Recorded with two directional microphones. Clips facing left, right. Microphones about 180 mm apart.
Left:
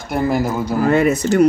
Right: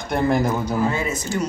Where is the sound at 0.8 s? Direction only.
65° left (ahead or behind).